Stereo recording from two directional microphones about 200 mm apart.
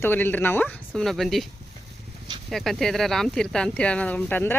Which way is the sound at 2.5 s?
Centre (ahead or behind).